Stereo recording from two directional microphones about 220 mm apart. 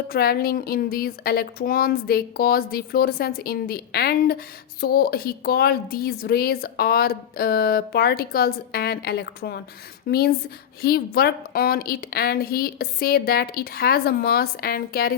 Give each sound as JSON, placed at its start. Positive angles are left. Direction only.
{"t": 0.1, "sound": "a woman's voice", "side_deg": 45}